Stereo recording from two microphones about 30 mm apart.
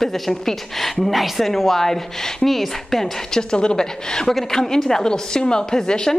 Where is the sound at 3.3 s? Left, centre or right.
Left.